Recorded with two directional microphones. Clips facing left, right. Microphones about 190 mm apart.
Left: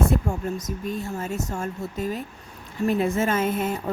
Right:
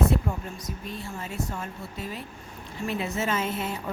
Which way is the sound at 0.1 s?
45° left (ahead or behind).